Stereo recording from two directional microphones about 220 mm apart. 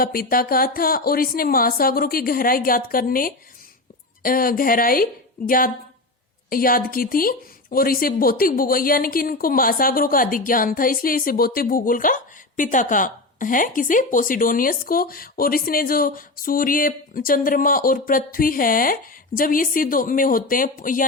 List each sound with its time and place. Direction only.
0.0 s a woman's voice: 40° left (ahead or behind)